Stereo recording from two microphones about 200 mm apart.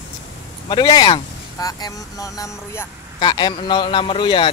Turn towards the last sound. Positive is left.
turn(degrees=25)  # may be behind; listen again after turning